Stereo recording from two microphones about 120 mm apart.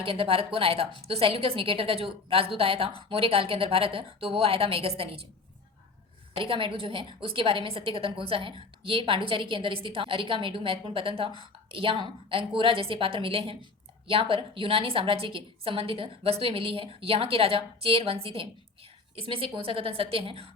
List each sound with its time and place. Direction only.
0.0 s a woman's voice: 50° right (ahead or behind)
6.4 s a woman's voice: 45° right (ahead or behind)